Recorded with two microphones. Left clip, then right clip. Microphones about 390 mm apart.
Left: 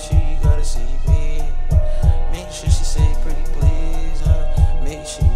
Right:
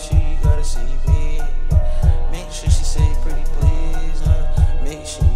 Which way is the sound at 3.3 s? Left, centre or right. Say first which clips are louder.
Even; left.